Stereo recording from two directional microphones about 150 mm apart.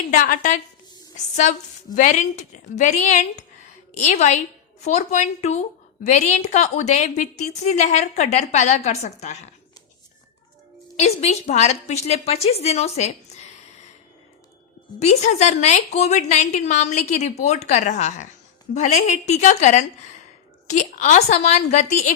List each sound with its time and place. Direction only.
0.1 s a woman's voice: 60° left (ahead or behind)
2.0 s a woman's voice: 55° left (ahead or behind)
10.9 s a woman's voice: 45° left (ahead or behind)
14.9 s a woman's voice: 45° left (ahead or behind)